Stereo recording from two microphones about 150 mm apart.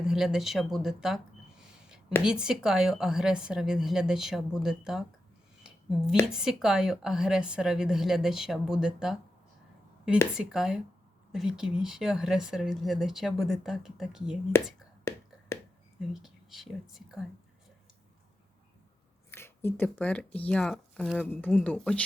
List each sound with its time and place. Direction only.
0.0 s speech: 5° right (ahead or behind)
2.2 s speech: 5° right (ahead or behind)
5.6 s a sound: 5° right (ahead or behind)
6.2 s speech: 5° right (ahead or behind)
10.3 s speech: 5° right (ahead or behind)
15.1 s speech: 15° left (ahead or behind)
15.5 s a sound: 20° left (ahead or behind)
16.0 s speech: centre (ahead or behind)
19.3 s speech: 15° left (ahead or behind)